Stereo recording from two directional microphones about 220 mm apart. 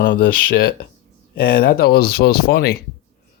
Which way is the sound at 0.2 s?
45° left (ahead or behind).